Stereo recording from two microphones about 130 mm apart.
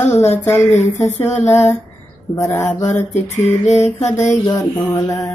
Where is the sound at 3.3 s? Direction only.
65° left (ahead or behind).